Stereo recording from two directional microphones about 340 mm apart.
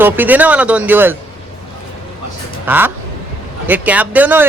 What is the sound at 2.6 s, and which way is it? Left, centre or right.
Speech, centre.